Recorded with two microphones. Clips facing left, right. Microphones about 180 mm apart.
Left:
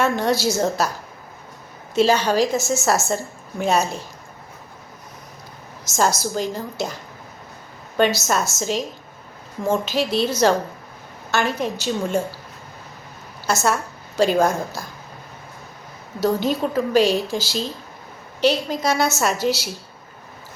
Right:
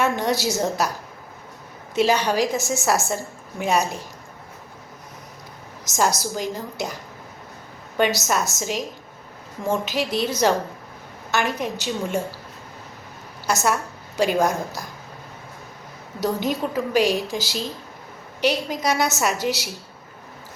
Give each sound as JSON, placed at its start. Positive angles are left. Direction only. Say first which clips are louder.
{"t": 0.0, "sound": "a woman's voice", "louder": "left 2 dB", "side_deg": -15}
{"t": 2.0, "sound": "a woman's voice", "louder": "left 2 dB", "side_deg": -15}
{"t": 5.8, "sound": "a woman's voice", "louder": "left 2 dB", "side_deg": -15}
{"t": 7.9, "sound": "a woman's voice", "louder": "left 2 dB", "side_deg": -15}
{"t": 9.8, "sound": "a woman's voice", "louder": "left 3 dB", "side_deg": -15}
{"t": 13.5, "sound": "a woman's voice", "louder": "left 1 dB", "side_deg": -15}
{"t": 16.2, "sound": "a woman's voice", "louder": "left 3 dB", "side_deg": -15}